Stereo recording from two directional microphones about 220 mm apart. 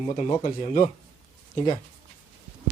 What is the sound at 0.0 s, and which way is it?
Speech, 30° left (ahead or behind).